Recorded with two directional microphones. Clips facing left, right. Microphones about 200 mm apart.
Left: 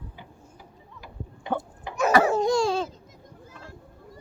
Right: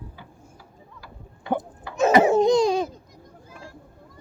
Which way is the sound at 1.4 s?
20° left (ahead or behind).